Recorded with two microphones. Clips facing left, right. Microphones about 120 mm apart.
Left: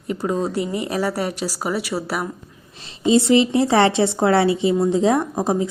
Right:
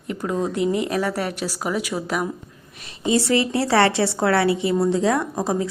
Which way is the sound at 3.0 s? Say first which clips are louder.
Left 4 dB; 20° left (ahead or behind).